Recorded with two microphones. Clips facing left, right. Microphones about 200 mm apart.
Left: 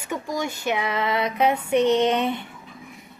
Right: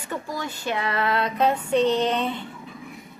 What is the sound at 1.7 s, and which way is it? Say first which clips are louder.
Speech: left 3 dB; 20° left (ahead or behind).